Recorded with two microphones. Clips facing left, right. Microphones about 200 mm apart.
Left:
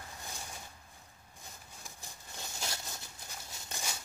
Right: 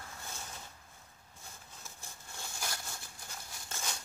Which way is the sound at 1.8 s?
15° left (ahead or behind).